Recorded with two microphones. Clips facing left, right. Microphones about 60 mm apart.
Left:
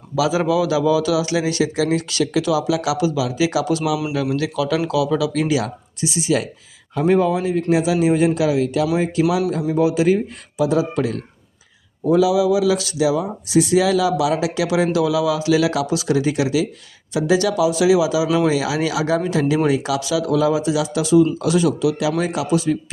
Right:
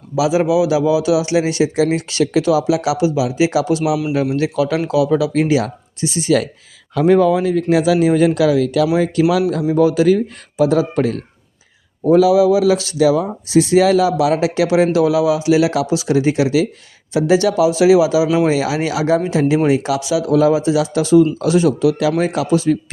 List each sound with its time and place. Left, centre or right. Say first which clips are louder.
0.2 s a man's voice: right 3 dB; right
9.5 s a man's voice: right 4 dB; right